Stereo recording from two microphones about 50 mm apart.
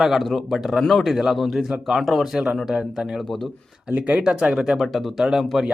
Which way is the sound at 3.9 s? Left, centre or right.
Right.